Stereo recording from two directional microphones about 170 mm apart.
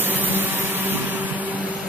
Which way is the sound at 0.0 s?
10° right (ahead or behind).